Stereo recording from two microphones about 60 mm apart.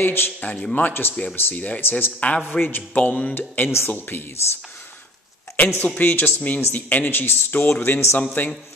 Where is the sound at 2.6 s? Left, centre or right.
Left.